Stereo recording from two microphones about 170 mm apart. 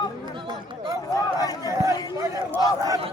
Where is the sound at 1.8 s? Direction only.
20° right (ahead or behind).